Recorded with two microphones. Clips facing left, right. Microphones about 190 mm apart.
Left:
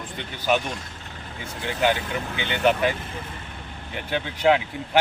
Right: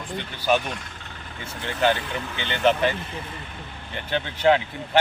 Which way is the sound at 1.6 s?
10° left (ahead or behind).